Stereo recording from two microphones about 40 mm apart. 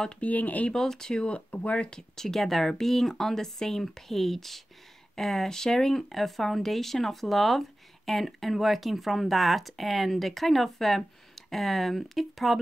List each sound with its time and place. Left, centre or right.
0.2 s speech: left
0.7 s speech: centre
1.2 s speech: left
1.9 s speech: centre